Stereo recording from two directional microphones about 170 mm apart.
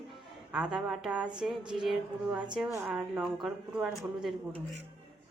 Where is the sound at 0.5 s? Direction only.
5° right (ahead or behind).